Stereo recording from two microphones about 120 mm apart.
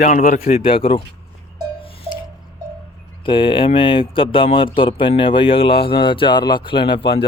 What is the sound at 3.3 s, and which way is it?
Speech, 45° left (ahead or behind).